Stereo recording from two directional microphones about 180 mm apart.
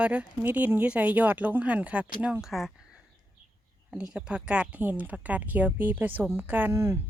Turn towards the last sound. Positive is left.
turn(degrees=-15)  # may be behind; listen again after turning